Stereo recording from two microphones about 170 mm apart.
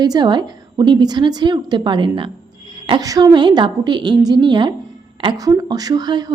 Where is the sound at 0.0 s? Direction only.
25° right (ahead or behind).